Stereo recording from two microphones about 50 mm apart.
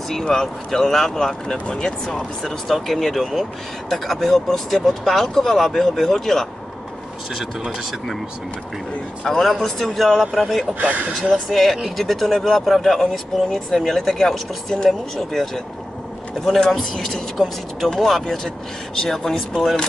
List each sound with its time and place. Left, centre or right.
0.1 s speech: centre
2.4 s speech: centre
9.9 s speech: centre
10.8 s speech: right
11.5 s speech: centre